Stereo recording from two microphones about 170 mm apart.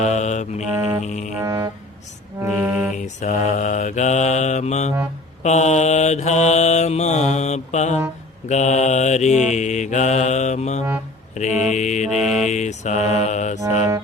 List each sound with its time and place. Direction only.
0.0 s mantra: 45° left (ahead or behind)
1.4 s music: 20° right (ahead or behind)
2.5 s music: centre (ahead or behind)
2.9 s mantra: 45° left (ahead or behind)
12.0 s music: centre (ahead or behind)
12.5 s mantra: 45° left (ahead or behind)